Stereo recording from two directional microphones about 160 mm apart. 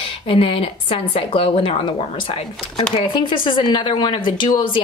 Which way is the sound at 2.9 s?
30° left (ahead or behind).